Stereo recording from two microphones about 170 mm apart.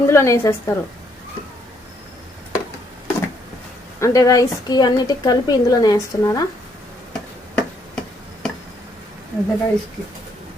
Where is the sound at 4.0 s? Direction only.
20° left (ahead or behind).